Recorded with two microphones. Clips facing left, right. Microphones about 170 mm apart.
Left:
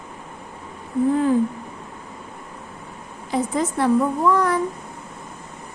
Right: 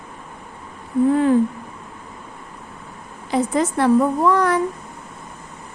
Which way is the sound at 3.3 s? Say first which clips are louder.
Right 3 dB; 75° right (ahead or behind).